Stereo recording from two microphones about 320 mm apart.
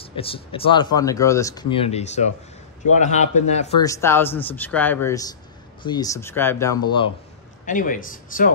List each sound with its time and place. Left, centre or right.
0.0 s a man's voice: centre
3.8 s speech: centre
7.6 s a man's voice: left